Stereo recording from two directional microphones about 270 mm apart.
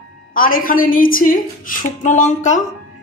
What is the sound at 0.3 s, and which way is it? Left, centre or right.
A woman's voice, left.